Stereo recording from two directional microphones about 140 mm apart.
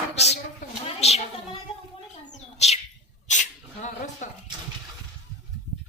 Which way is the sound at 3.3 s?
60° left (ahead or behind).